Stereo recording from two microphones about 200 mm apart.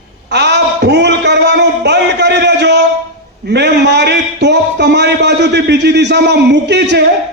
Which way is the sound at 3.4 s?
60° right (ahead or behind).